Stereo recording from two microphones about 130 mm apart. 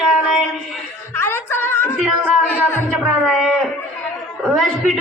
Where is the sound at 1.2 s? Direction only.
15° left (ahead or behind).